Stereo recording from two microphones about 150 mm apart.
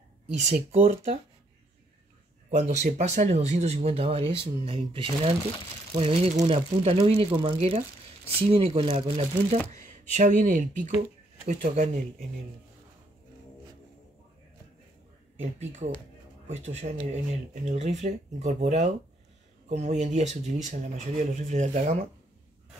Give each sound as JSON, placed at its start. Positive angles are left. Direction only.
{"t": 0.3, "sound": "speech", "side_deg": -50}
{"t": 2.5, "sound": "speech", "side_deg": -50}
{"t": 9.7, "sound": "speech", "side_deg": -55}
{"t": 15.4, "sound": "speech", "side_deg": -50}